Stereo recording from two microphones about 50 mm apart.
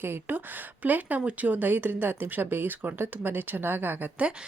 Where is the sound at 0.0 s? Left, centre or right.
Right.